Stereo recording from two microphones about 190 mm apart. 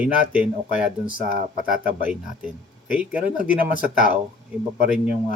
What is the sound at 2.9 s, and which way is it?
Speech, 5° right (ahead or behind).